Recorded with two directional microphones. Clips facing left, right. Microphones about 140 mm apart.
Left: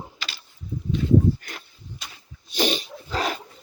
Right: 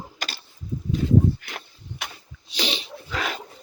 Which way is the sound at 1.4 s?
40° left (ahead or behind).